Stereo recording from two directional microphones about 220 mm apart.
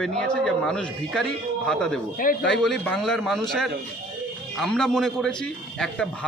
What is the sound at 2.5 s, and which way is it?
A man's voice, 5° left (ahead or behind).